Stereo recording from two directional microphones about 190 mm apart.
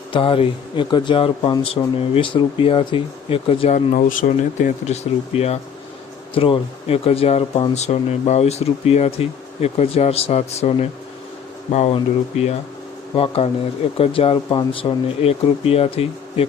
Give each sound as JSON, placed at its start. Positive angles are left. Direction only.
{"t": 0.1, "sound": "speech", "side_deg": 30}